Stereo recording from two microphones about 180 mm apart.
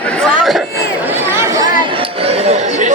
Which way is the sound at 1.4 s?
20° right (ahead or behind).